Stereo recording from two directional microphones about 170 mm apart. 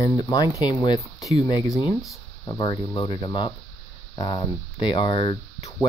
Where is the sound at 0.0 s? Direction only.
20° left (ahead or behind).